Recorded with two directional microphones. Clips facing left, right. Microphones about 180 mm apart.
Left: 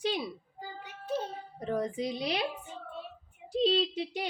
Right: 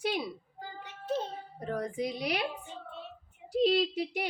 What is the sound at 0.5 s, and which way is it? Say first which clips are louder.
Music: even; 10° left (ahead or behind).